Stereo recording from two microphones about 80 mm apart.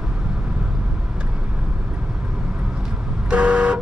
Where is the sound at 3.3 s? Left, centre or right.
Centre.